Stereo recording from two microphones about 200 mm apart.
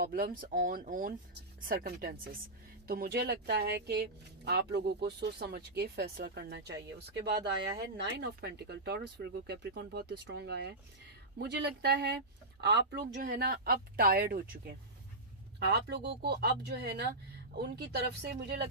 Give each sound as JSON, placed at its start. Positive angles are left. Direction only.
{"t": 0.0, "sound": "speech", "side_deg": -45}